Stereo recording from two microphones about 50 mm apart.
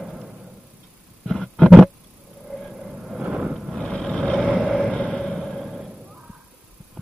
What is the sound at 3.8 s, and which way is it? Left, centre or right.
Vehicle, centre.